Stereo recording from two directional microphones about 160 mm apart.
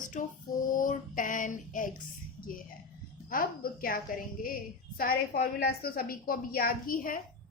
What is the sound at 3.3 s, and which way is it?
A woman's voice, 65° left (ahead or behind).